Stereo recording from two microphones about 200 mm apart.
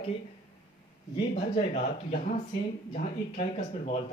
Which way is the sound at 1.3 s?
35° left (ahead or behind).